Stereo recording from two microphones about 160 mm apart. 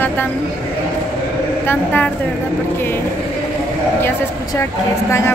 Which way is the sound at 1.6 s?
10° left (ahead or behind).